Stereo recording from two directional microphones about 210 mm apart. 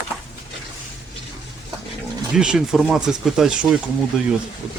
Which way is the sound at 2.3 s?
5° right (ahead or behind).